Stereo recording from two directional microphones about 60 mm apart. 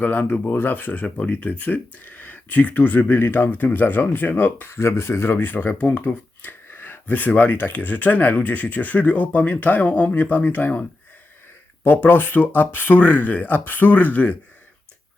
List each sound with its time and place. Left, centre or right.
0.0 s speech: left
4.8 s speech: left